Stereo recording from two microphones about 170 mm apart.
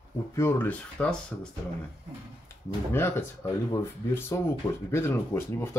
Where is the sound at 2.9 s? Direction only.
15° left (ahead or behind).